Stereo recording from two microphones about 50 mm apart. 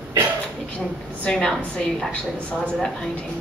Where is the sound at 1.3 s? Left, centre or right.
Centre.